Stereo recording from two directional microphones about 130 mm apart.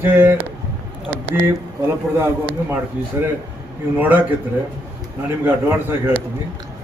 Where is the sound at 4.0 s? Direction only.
15° right (ahead or behind).